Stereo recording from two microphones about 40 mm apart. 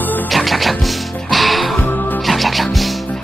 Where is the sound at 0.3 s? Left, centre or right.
Centre.